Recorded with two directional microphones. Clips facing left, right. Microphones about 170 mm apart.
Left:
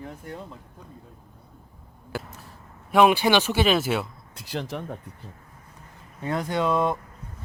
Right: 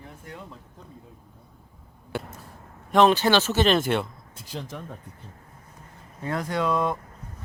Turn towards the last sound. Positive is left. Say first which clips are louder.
# left 1 dB
turn(degrees=25)  # may be behind; listen again after turning